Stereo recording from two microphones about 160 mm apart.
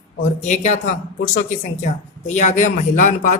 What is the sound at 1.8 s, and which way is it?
Speech, 45° left (ahead or behind).